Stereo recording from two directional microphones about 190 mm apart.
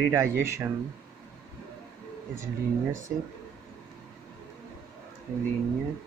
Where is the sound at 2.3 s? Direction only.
15° right (ahead or behind).